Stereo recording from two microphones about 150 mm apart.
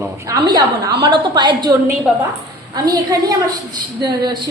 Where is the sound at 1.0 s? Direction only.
30° right (ahead or behind).